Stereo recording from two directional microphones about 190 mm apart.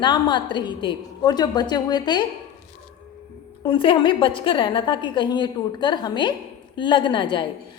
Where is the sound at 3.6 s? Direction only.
25° left (ahead or behind).